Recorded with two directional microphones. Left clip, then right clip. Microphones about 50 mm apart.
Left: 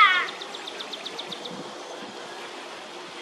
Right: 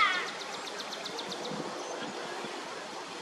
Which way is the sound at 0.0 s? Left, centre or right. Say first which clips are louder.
Left 10 dB; left.